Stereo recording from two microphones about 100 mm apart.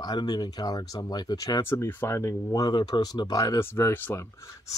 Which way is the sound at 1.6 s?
25° left (ahead or behind).